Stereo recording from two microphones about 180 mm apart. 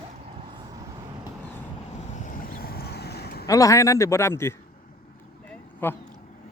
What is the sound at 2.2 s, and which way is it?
Boat, 50° left (ahead or behind).